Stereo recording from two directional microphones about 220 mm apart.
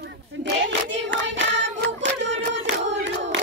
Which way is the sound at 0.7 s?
55° right (ahead or behind).